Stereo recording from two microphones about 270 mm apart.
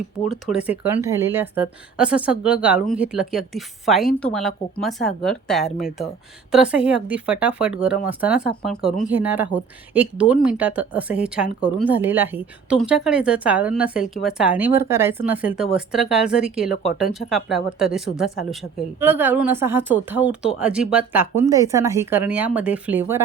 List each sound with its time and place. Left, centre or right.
0.3 s speech: centre
8.9 s speech: centre
9.1 s speech: centre